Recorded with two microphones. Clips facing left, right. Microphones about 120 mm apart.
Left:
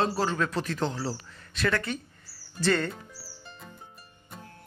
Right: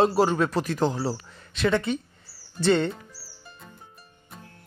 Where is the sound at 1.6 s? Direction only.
20° right (ahead or behind).